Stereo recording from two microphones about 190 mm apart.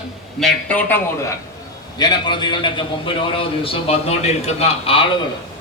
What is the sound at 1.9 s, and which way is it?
A man's voice, 20° left (ahead or behind).